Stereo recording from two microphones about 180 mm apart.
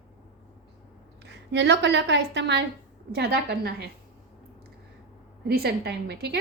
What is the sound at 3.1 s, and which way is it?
Speech, 60° right (ahead or behind).